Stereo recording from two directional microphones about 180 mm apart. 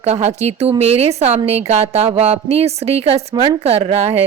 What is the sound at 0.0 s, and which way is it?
Speech, 40° right (ahead or behind).